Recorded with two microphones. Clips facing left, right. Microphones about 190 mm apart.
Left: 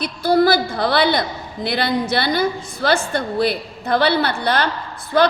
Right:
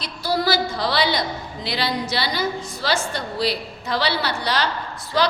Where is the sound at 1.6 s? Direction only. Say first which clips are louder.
Left 5 dB; 55° left (ahead or behind).